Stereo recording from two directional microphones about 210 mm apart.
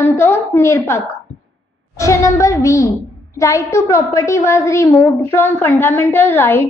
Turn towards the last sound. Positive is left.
turn(degrees=10)  # may be behind; listen again after turning